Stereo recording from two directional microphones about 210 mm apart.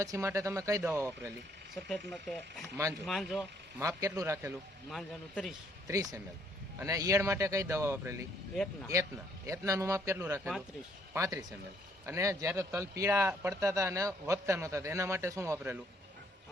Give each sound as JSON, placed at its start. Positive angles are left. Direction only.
{"t": 0.0, "sound": "speech", "side_deg": -15}
{"t": 2.0, "sound": "speech", "side_deg": 0}
{"t": 3.8, "sound": "speech", "side_deg": -15}
{"t": 4.9, "sound": "speech", "side_deg": 0}
{"t": 5.9, "sound": "speech", "side_deg": -15}